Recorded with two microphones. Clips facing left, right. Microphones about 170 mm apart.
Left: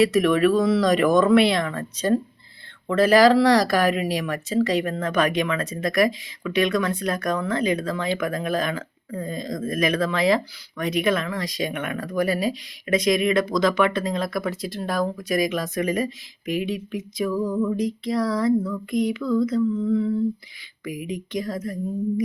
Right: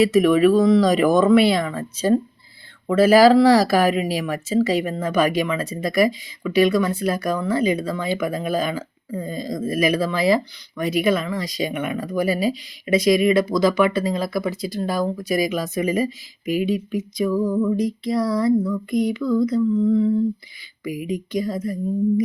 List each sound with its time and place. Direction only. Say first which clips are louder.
0.0 s speech: right 3 dB; 5° right (ahead or behind)
2.8 s speech: right 3 dB; 5° right (ahead or behind)